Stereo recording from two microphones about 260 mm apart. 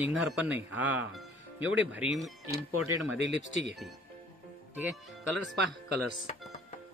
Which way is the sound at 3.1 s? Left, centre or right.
Right.